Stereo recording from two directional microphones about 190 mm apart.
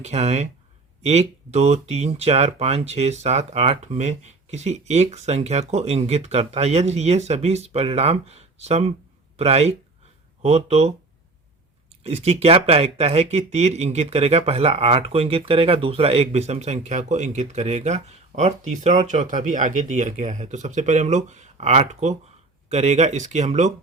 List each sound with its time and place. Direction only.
0.0 s speech: 35° right (ahead or behind)
12.0 s speech: 35° right (ahead or behind)